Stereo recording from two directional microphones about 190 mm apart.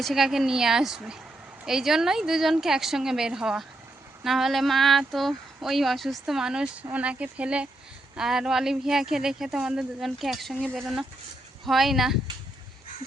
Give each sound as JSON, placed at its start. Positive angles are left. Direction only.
{"t": 0.0, "sound": "speech", "side_deg": 0}